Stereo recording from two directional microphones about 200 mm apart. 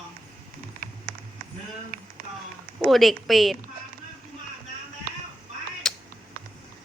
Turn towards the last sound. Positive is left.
turn(degrees=5)  # may be behind; listen again after turning